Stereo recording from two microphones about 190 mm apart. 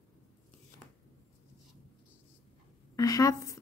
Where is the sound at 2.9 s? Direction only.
20° left (ahead or behind).